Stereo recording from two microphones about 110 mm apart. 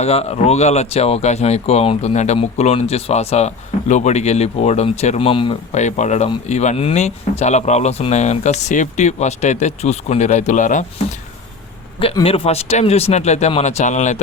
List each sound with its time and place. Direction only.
0.0 s speech: 70° left (ahead or behind); by 5.5 s 50° left (ahead or behind)
5.7 s speech: 90° left
12.2 s speech: 60° left (ahead or behind); by 14.2 s 90° left